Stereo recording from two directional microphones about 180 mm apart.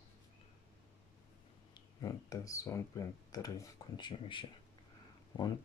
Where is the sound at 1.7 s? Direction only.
20° left (ahead or behind).